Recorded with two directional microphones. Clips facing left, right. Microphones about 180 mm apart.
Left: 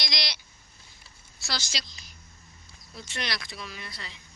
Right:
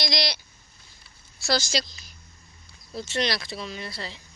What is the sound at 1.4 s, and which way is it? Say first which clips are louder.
Speech: right 11 dB; 40° right (ahead or behind).